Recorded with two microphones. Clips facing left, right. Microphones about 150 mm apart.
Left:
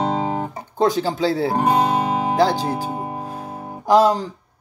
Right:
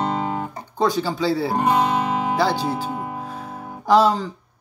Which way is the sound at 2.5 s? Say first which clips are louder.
Left 1 dB; 15° left (ahead or behind).